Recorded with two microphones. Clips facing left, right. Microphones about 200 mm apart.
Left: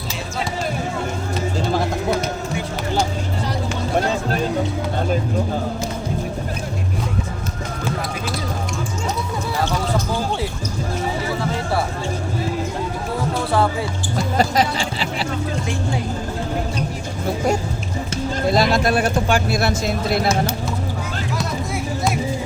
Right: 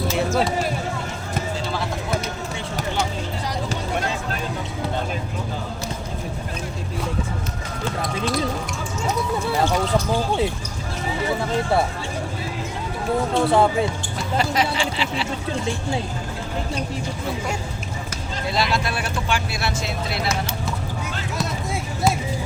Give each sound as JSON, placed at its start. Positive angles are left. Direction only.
{"t": 1.6, "sound": "run", "side_deg": 45}
{"t": 13.3, "sound": "speech", "side_deg": -20}
{"t": 14.3, "sound": "speech", "side_deg": 40}
{"t": 18.4, "sound": "speech", "side_deg": 40}